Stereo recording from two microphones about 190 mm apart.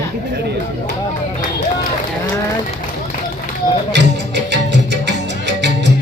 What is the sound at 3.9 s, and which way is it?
Music, 65° right (ahead or behind).